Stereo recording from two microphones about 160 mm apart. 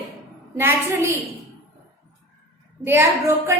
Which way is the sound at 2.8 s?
15° right (ahead or behind).